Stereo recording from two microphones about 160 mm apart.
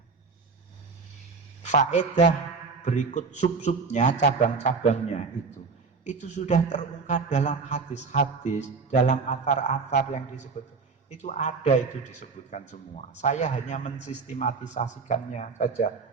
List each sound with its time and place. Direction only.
1.6 s a man's voice: 50° left (ahead or behind)